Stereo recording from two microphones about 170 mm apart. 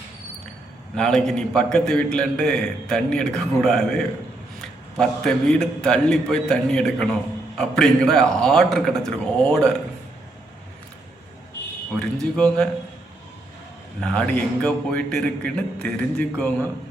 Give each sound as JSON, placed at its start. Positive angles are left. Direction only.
{"t": 0.9, "sound": "a man's voice", "side_deg": 5}
{"t": 12.2, "sound": "a man's voice", "side_deg": 5}
{"t": 14.0, "sound": "a man's voice", "side_deg": 5}